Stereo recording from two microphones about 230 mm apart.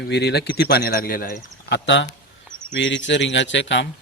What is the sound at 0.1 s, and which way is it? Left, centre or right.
Speech, left.